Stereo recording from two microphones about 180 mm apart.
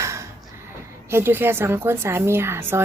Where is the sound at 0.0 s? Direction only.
15° right (ahead or behind).